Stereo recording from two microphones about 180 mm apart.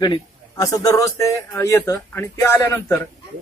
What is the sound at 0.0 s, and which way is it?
Speech, 20° left (ahead or behind).